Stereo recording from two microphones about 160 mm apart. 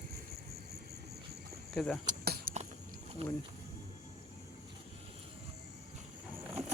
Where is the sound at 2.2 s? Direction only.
75° right (ahead or behind).